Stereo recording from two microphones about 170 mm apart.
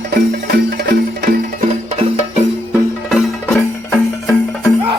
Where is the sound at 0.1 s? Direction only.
75° right (ahead or behind).